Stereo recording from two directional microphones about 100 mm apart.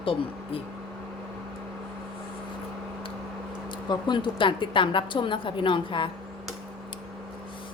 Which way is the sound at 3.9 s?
50° left (ahead or behind).